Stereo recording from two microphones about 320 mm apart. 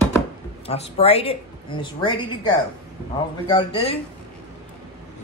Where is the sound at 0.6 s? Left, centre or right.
Centre.